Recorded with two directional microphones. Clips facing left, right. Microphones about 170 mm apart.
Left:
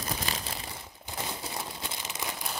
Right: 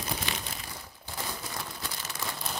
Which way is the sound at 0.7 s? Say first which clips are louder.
Left 1 dB; 20° left (ahead or behind).